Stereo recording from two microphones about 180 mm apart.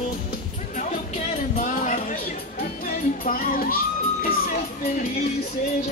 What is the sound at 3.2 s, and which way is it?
Music, 50° left (ahead or behind).